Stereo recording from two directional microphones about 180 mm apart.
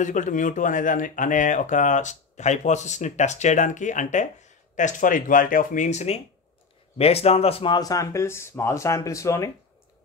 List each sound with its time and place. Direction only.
0.0 s speech: 45° left (ahead or behind); by 9.5 s 15° left (ahead or behind)